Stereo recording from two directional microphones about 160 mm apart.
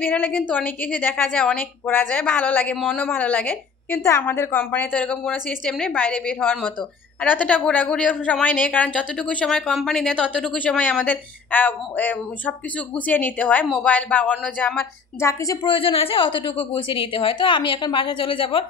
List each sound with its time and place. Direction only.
0.0 s a woman's voice: 10° left (ahead or behind)
15.6 s a woman's voice: 35° left (ahead or behind)